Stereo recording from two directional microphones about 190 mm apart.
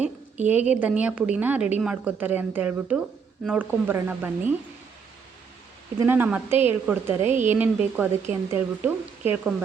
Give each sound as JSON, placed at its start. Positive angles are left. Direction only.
{"t": 0.4, "sound": "a woman's voice", "side_deg": -10}
{"t": 6.0, "sound": "a woman's voice", "side_deg": -10}